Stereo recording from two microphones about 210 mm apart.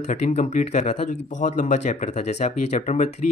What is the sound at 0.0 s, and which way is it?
Speech, 35° left (ahead or behind).